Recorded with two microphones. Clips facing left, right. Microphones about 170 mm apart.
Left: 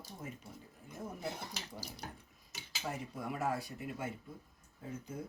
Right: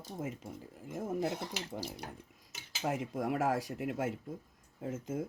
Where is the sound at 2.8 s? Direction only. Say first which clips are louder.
Right 7 dB; 90° right.